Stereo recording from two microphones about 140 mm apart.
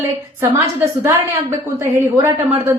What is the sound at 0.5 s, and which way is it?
A woman's voice, 20° right (ahead or behind).